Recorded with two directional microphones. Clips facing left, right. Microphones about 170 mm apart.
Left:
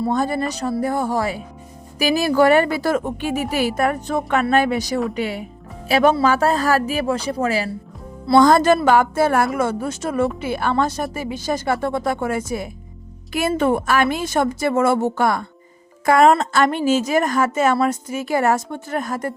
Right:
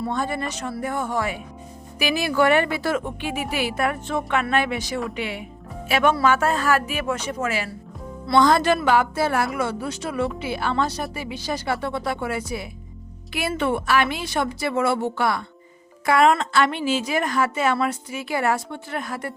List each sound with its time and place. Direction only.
0.0 s a woman's voice: 40° left (ahead or behind)